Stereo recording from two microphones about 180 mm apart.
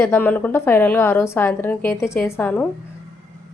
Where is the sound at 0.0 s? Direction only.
10° left (ahead or behind).